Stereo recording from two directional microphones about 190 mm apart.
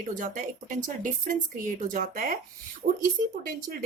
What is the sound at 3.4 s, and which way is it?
Speech, 45° right (ahead or behind).